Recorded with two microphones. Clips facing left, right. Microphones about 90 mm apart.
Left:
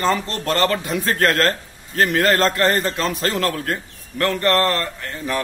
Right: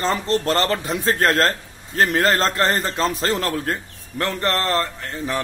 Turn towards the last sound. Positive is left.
turn(degrees=-25)  # may be behind; listen again after turning